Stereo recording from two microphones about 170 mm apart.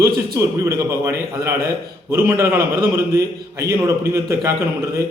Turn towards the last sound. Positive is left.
turn(degrees=-15)  # may be behind; listen again after turning